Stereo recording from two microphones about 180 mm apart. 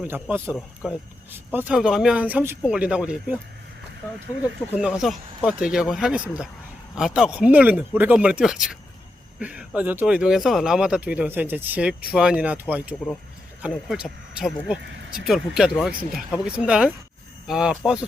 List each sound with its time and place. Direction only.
0.0 s speech: 10° right (ahead or behind)
0.5 s speech: centre (ahead or behind)
4.7 s speech: 5° right (ahead or behind)